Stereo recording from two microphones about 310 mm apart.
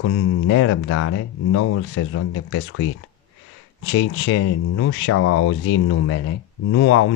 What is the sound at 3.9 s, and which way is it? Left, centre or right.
Speech, left.